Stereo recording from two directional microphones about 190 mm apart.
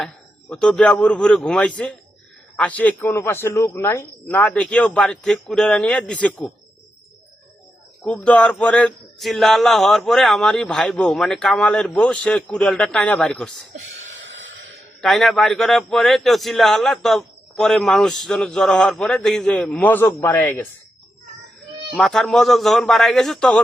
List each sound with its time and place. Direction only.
0.0 s speech: 5° left (ahead or behind)
8.0 s speech: 5° left (ahead or behind)
13.7 s a sound: 75° right (ahead or behind)
15.0 s speech: centre (ahead or behind)
21.9 s speech: centre (ahead or behind)